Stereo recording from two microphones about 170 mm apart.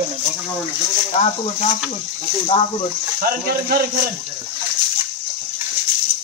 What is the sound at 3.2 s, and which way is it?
Speech, 60° right (ahead or behind).